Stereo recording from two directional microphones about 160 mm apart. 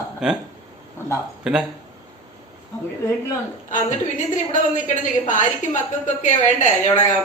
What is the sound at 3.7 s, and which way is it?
A woman's voice, 50° left (ahead or behind).